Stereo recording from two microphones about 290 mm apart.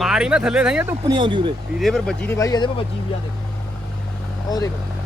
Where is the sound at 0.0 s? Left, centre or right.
Centre.